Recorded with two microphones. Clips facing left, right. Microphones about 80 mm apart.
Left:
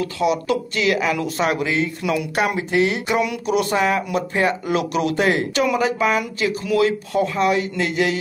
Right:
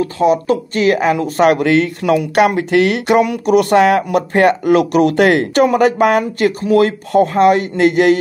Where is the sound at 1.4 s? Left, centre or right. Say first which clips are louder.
Right 10 dB; right.